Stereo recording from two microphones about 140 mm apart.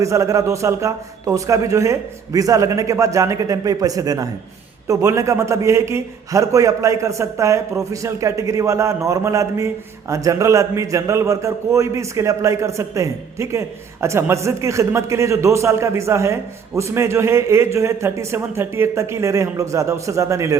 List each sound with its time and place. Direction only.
0.0 s a man's voice: 20° right (ahead or behind)